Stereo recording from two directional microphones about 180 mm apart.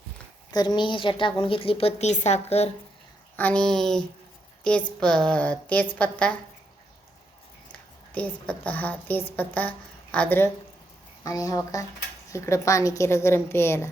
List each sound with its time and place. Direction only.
0.5 s a woman's voice: 25° left (ahead or behind)
3.3 s a woman's voice: 10° left (ahead or behind)
7.7 s a woman's voice: 10° left (ahead or behind)